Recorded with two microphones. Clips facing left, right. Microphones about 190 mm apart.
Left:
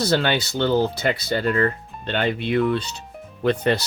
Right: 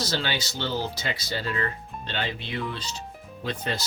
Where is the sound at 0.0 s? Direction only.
60° left (ahead or behind).